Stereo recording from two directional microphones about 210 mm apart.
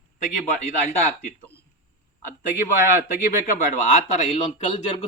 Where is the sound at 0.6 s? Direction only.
35° left (ahead or behind).